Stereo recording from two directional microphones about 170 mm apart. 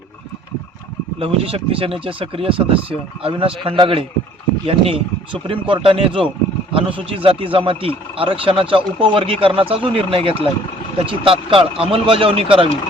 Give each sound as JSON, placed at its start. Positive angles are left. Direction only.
{"t": 1.2, "sound": "speech", "side_deg": -35}